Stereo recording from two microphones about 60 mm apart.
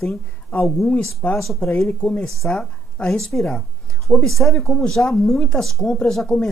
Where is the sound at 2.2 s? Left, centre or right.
Centre.